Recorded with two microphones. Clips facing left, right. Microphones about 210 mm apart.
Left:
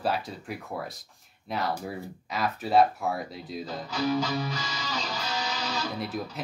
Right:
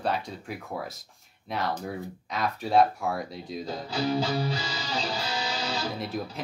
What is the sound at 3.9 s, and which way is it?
Music, 30° right (ahead or behind).